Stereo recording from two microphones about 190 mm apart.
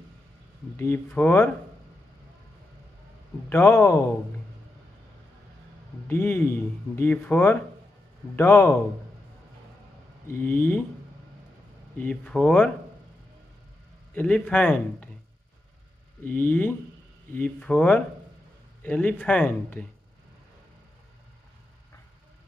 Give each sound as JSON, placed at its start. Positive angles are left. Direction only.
{"t": 0.7, "sound": "speech", "side_deg": 10}
{"t": 3.4, "sound": "speech", "side_deg": 10}
{"t": 6.0, "sound": "speech", "side_deg": 10}
{"t": 10.3, "sound": "speech", "side_deg": 10}
{"t": 12.0, "sound": "speech", "side_deg": 5}
{"t": 14.1, "sound": "speech", "side_deg": 5}
{"t": 16.3, "sound": "speech", "side_deg": 10}